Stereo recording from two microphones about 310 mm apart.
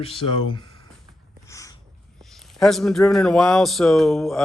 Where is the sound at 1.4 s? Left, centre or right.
Centre.